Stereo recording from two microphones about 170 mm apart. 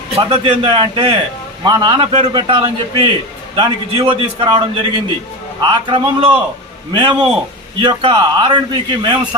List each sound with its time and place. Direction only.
0.2 s a man's voice: 30° right (ahead or behind)